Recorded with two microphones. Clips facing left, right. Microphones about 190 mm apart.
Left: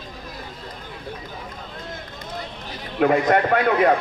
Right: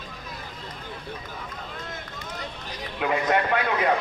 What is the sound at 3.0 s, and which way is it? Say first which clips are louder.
Speech: left 6 dB; 50° left (ahead or behind).